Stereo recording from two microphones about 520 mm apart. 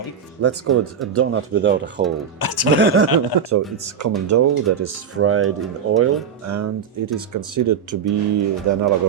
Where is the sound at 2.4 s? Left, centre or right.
Left.